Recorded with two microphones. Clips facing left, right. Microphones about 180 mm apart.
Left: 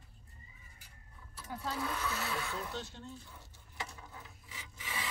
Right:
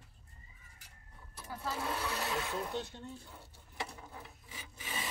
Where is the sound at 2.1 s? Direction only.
20° right (ahead or behind).